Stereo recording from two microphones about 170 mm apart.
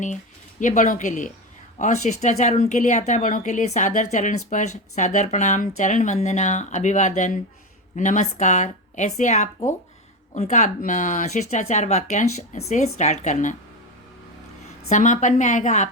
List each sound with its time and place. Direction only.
0.6 s speech: 50° left (ahead or behind)
14.8 s speech: 45° left (ahead or behind)